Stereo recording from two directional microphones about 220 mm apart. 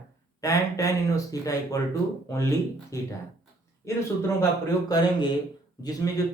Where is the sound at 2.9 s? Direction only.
15° left (ahead or behind).